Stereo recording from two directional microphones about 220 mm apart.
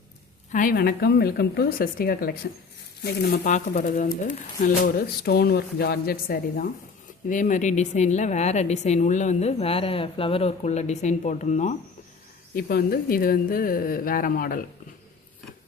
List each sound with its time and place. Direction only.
0.5 s a woman's voice: 40° left (ahead or behind)